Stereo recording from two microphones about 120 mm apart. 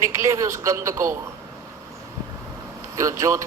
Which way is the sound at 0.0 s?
25° right (ahead or behind).